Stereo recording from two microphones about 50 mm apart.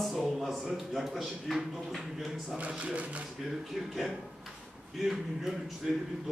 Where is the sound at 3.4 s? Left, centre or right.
Centre.